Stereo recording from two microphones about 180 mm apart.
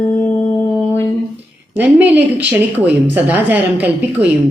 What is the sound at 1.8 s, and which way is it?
Speech, 10° right (ahead or behind).